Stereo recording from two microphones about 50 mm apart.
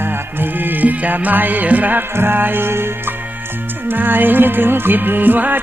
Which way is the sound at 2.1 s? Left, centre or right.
Right.